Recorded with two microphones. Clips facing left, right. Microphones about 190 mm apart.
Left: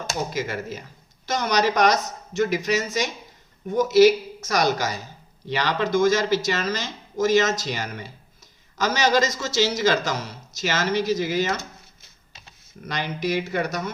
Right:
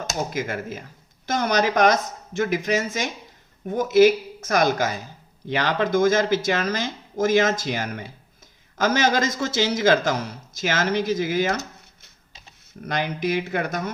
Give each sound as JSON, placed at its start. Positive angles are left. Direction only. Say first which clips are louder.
{"t": 0.1, "sound": "speech", "louder": "even", "side_deg": -50}
{"t": 12.8, "sound": "speech", "louder": "right 2 dB", "side_deg": -50}